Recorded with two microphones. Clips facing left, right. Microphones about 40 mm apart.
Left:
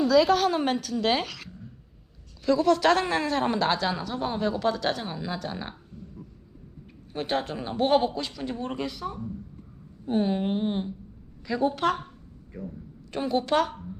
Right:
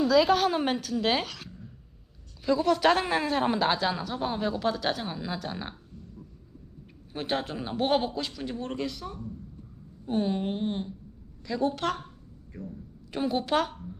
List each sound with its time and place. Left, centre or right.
0.0 s a woman's voice: centre
7.1 s a woman's voice: centre